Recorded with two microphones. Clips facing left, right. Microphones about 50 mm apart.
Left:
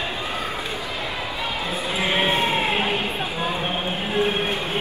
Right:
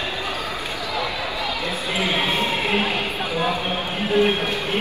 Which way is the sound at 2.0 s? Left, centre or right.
Left.